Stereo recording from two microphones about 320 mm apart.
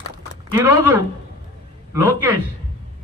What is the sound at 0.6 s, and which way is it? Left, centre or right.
Speech, centre.